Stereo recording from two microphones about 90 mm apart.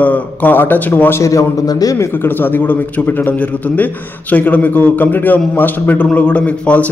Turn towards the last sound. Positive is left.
turn(degrees=15)  # may be behind; listen again after turning